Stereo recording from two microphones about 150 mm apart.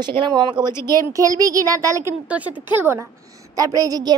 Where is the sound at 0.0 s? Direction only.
30° right (ahead or behind).